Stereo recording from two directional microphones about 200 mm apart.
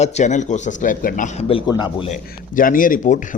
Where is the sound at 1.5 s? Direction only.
20° left (ahead or behind).